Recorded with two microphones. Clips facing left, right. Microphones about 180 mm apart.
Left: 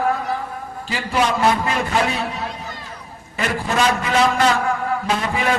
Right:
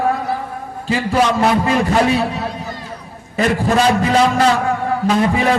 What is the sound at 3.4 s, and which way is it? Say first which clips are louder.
A man's voice: right 6 dB; 35° right (ahead or behind).